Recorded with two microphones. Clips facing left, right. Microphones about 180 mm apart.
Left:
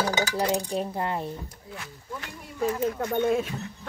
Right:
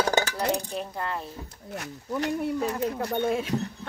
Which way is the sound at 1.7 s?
40° right (ahead or behind).